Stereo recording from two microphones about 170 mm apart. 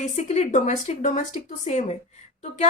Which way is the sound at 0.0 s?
40° left (ahead or behind).